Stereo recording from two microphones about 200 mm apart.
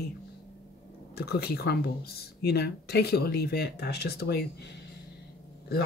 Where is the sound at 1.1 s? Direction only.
50° left (ahead or behind).